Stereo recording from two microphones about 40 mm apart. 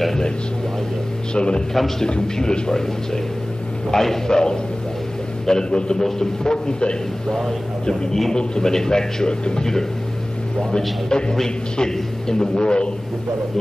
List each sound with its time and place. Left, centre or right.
1.3 s a man's voice: left
1.7 s a man's voice: centre
2.0 s a man's voice: centre
3.9 s a man's voice: centre
5.9 s a man's voice: centre
7.2 s a man's voice: centre
8.4 s a man's voice: centre
11.1 s a man's voice: centre